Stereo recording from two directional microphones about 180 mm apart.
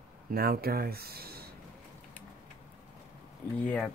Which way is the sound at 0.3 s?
55° right (ahead or behind).